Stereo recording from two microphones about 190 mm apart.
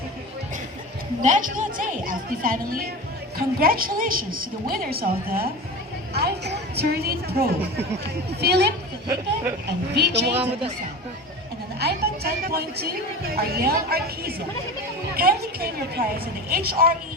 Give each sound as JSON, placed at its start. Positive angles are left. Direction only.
{"t": 1.2, "sound": "a woman's voice", "side_deg": -40}
{"t": 9.0, "sound": "speech", "side_deg": -15}
{"t": 9.6, "sound": "a woman's voice", "side_deg": -60}
{"t": 10.3, "sound": "speech", "side_deg": -30}
{"t": 11.8, "sound": "a woman's voice", "side_deg": -55}